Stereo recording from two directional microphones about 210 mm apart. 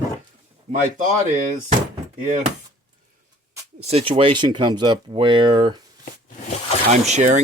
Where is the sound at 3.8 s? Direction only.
30° right (ahead or behind).